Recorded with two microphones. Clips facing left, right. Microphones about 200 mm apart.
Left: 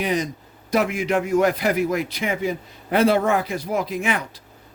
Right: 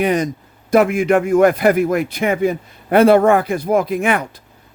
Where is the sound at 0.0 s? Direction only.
55° right (ahead or behind).